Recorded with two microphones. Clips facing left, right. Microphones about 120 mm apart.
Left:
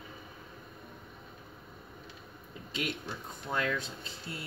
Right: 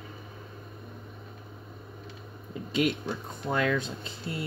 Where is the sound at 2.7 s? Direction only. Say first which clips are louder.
Right 9 dB; 65° right (ahead or behind).